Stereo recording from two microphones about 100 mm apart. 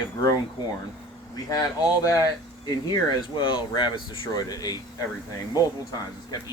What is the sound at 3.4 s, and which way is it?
Speech, 55° left (ahead or behind).